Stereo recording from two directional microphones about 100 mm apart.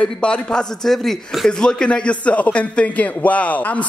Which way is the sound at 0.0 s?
10° left (ahead or behind).